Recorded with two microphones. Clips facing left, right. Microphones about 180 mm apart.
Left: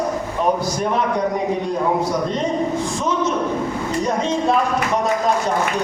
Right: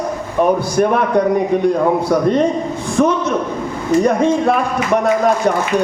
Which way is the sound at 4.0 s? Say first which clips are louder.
Right 6 dB; 60° right (ahead or behind).